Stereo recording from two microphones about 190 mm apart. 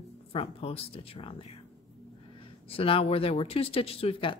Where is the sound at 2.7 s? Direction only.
30° left (ahead or behind).